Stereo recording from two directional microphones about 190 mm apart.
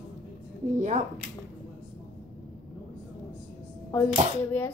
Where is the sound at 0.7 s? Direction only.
40° right (ahead or behind).